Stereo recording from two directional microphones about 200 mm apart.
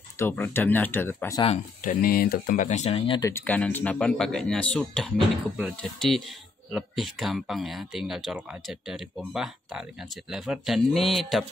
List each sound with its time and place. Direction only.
0.2 s speech: 10° left (ahead or behind)
1.4 s speech: 35° left (ahead or behind); by 11.4 s centre (ahead or behind)